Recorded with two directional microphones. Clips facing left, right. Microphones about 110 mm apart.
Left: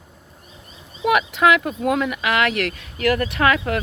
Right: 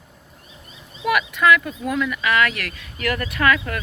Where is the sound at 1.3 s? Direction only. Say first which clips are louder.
Left 1 dB; 60° left (ahead or behind).